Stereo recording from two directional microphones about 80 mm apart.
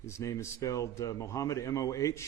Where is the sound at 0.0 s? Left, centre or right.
Left.